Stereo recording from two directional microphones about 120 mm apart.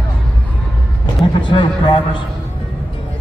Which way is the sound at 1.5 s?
45° left (ahead or behind).